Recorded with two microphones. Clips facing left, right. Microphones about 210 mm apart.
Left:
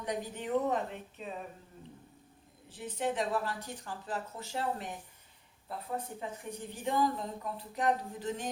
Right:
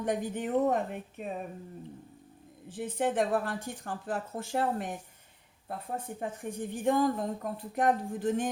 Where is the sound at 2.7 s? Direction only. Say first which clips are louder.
Right 4 dB; 50° right (ahead or behind).